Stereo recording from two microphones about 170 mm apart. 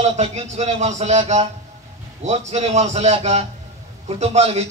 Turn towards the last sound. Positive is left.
turn(degrees=-40)  # may be behind; listen again after turning